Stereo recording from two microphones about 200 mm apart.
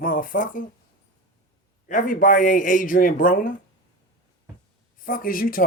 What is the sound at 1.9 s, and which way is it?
Speech, 40° left (ahead or behind).